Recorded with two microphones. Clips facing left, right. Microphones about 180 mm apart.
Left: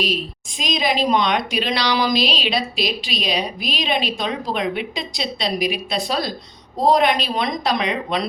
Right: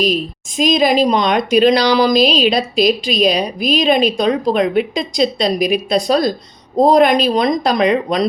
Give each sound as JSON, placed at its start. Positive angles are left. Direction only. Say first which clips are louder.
{"t": 0.0, "sound": "a woman's voice", "louder": "right 7 dB", "side_deg": -45}